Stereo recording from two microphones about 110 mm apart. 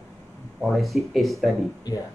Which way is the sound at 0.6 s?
Centre (ahead or behind).